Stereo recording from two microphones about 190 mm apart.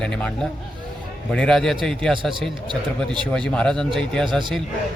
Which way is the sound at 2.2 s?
25° right (ahead or behind).